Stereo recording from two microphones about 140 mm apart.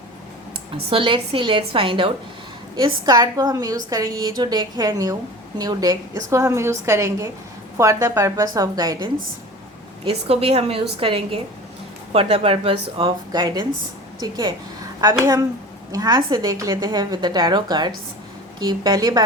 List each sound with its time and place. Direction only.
0.9 s a woman's voice: 40° right (ahead or behind)
10.1 s a woman's voice: 45° right (ahead or behind); by 19.2 s 30° right (ahead or behind)